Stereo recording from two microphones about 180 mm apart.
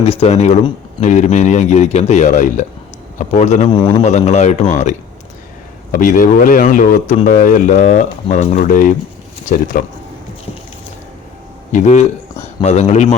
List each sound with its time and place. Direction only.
0.0 s speech: 35° left (ahead or behind)
3.7 s a man's voice: 25° left (ahead or behind)
4.0 s speech: 40° left (ahead or behind)
11.7 s speech: 40° left (ahead or behind)